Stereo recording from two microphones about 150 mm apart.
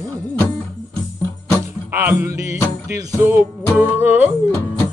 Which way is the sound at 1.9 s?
15° right (ahead or behind).